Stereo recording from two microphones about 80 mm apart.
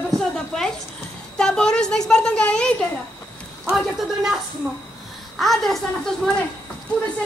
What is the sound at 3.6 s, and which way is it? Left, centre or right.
Speech, centre.